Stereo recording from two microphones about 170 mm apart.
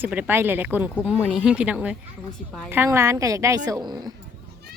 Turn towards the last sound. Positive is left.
turn(degrees=-25)  # may be behind; listen again after turning